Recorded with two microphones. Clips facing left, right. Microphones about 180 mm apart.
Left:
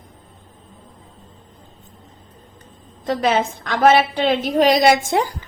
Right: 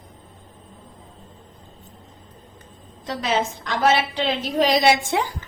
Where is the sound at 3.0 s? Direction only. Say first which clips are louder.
Left 5 dB; 55° left (ahead or behind).